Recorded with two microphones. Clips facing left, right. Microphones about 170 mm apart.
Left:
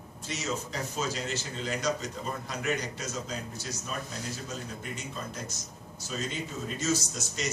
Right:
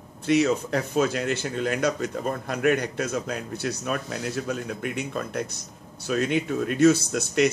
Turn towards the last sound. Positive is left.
turn(degrees=-60)  # may be behind; listen again after turning